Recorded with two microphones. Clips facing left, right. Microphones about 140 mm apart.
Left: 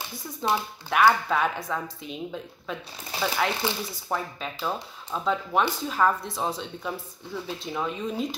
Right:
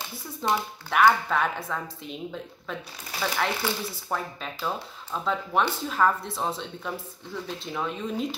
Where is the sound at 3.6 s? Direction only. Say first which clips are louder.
Even; 15° left (ahead or behind).